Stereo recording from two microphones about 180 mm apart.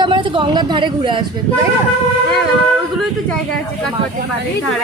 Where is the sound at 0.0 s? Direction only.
25° right (ahead or behind).